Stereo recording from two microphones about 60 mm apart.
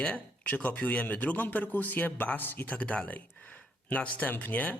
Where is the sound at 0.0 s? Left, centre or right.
Left.